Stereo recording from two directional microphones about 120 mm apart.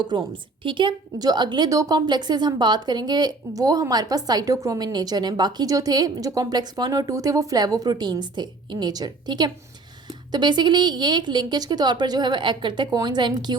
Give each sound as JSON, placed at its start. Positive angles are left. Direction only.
{"t": 0.0, "sound": "a woman's voice", "side_deg": -40}